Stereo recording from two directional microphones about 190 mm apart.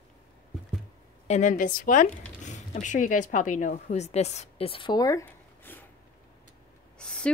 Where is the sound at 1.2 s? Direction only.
40° left (ahead or behind); by 5.8 s 15° left (ahead or behind).